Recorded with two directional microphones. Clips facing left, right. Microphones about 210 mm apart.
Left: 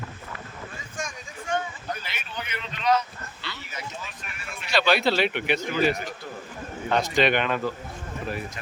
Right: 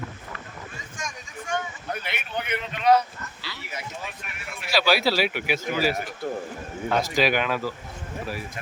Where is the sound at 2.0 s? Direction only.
55° right (ahead or behind).